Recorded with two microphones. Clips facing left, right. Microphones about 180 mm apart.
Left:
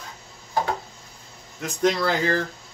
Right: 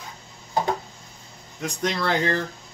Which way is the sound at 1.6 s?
5° left (ahead or behind).